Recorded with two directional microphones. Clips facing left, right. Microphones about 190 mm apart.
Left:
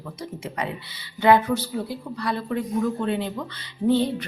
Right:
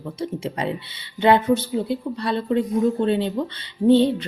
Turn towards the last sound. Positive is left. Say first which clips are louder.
# right 5 dB
turn(degrees=-25)  # may be behind; listen again after turning